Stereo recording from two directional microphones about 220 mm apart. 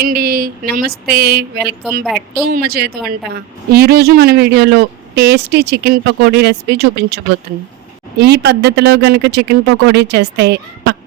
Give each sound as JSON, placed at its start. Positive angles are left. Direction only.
{"t": 0.0, "sound": "speech", "side_deg": -45}
{"t": 2.0, "sound": "speech", "side_deg": 0}
{"t": 2.5, "sound": "speech", "side_deg": -45}
{"t": 8.2, "sound": "speech", "side_deg": -50}